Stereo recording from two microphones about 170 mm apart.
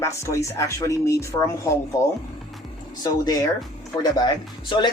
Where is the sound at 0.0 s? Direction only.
15° left (ahead or behind).